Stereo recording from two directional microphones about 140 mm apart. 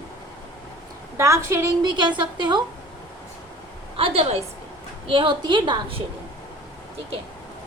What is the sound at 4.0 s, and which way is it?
A woman's voice, 45° right (ahead or behind).